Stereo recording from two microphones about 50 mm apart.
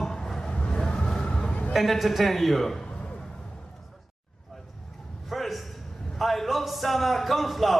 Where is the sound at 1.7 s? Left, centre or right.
Centre.